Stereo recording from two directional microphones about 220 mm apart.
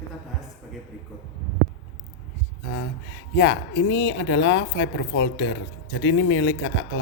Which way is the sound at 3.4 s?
55° left (ahead or behind).